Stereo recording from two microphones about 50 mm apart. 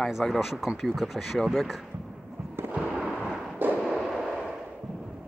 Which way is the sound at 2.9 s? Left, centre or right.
Centre.